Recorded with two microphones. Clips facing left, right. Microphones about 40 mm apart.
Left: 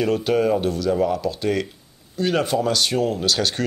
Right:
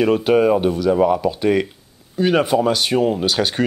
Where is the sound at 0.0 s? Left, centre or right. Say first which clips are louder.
Right 5 dB; centre.